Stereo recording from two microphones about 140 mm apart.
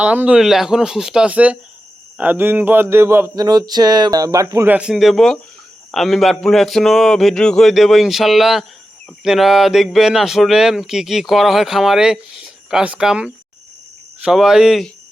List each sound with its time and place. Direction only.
0.0 s speech: 10° right (ahead or behind)
2.1 s a sound: 15° right (ahead or behind)
4.7 s speech: 5° right (ahead or behind)